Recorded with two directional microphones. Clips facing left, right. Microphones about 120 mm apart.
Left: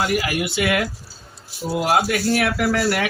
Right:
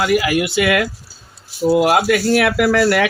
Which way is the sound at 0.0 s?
90° right.